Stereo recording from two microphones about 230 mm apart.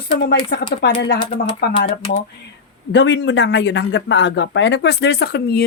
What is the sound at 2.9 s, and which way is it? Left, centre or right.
Speech, left.